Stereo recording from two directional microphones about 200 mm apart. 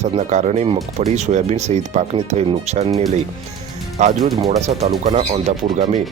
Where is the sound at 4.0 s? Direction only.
35° right (ahead or behind).